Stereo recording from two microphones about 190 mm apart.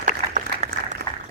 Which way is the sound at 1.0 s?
60° right (ahead or behind).